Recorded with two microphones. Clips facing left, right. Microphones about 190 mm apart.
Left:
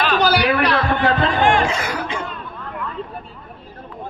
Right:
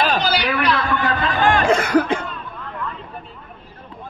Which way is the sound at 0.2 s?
50° left (ahead or behind).